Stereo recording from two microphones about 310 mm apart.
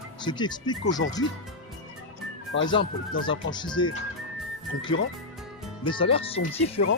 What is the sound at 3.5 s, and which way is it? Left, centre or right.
Speech, centre.